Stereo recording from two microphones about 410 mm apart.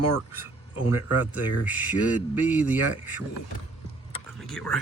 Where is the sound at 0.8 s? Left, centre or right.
Left.